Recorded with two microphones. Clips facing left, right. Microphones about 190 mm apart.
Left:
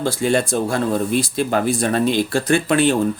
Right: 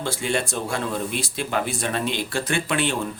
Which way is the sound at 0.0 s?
40° left (ahead or behind).